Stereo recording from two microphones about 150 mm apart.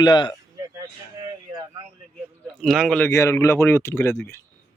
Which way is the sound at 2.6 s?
Centre (ahead or behind).